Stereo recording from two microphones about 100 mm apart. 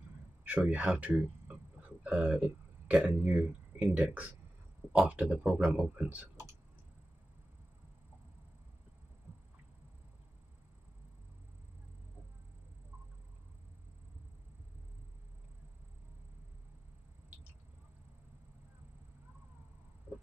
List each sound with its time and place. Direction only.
0.7 s speech: 10° right (ahead or behind)
5.4 s speech: 5° right (ahead or behind)
20.1 s a sound: 20° right (ahead or behind)